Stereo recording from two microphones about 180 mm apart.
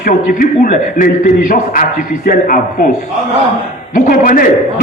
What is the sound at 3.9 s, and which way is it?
Speech, 45° left (ahead or behind).